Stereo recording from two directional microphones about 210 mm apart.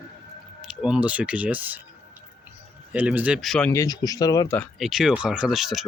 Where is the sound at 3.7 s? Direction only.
15° left (ahead or behind).